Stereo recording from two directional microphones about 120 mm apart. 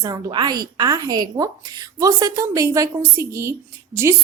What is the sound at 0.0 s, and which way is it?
A woman's voice, 35° right (ahead or behind).